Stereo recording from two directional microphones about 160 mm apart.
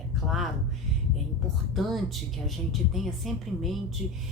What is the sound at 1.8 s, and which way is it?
A woman's voice, centre (ahead or behind).